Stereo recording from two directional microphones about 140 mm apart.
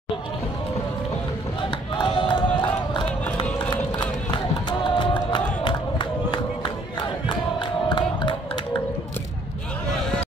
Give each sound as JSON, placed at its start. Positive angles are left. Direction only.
{"t": 1.6, "sound": "a sound", "side_deg": 35}
{"t": 4.3, "sound": "run", "side_deg": 35}
{"t": 5.6, "sound": "crowd", "side_deg": 35}